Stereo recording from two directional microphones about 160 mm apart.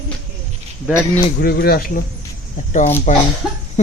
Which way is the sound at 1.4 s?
75° left (ahead or behind).